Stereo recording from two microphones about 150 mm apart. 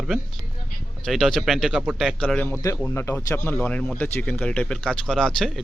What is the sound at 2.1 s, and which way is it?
Speech, 10° left (ahead or behind).